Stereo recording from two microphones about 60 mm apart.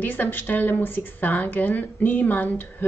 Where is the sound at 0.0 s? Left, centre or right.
Left.